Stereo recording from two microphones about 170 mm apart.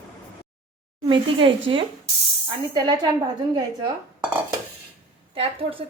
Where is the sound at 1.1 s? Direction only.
30° right (ahead or behind).